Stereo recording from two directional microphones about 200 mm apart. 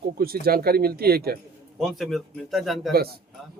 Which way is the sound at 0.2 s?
50° right (ahead or behind).